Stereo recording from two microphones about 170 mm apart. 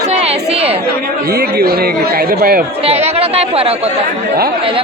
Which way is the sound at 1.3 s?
65° right (ahead or behind).